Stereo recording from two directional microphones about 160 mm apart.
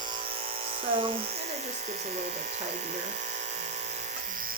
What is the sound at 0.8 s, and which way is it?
Speech, 35° right (ahead or behind).